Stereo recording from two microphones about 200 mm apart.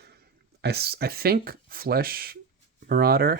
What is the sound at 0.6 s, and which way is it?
Speech, 55° right (ahead or behind).